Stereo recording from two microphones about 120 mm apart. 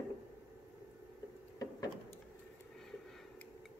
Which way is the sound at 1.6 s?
30° left (ahead or behind).